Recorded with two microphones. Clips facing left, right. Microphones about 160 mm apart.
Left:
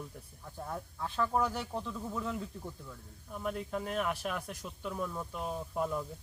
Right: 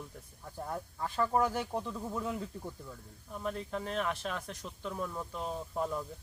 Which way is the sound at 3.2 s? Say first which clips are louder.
Even; 5° left (ahead or behind).